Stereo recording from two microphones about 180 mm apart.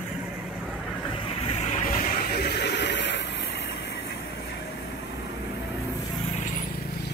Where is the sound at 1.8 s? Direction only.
50° left (ahead or behind); by 3.7 s 70° left (ahead or behind).